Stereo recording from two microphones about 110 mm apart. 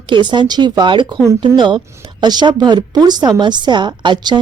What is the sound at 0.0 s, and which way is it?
A woman's voice, 45° right (ahead or behind).